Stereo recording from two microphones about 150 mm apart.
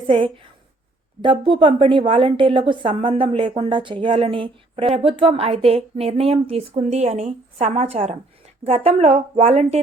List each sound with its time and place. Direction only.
1.2 s a woman's voice: 35° right (ahead or behind)